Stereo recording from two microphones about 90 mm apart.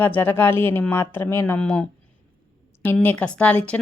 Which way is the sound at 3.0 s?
15° left (ahead or behind).